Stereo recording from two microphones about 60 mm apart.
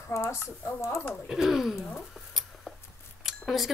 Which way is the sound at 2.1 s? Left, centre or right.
Centre.